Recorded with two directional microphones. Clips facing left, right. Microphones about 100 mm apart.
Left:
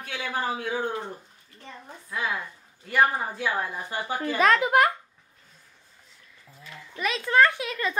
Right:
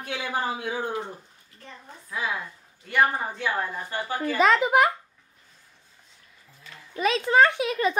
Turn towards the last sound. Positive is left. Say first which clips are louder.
# right 5 dB
turn(degrees=-20)  # may be behind; listen again after turning